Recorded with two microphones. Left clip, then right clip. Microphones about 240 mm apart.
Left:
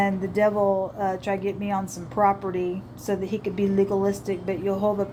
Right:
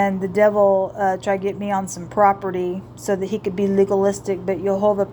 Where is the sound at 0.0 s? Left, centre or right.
Right.